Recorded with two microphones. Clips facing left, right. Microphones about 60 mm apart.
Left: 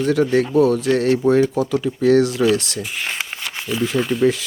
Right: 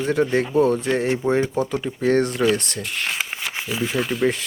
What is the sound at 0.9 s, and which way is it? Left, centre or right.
Speech, centre.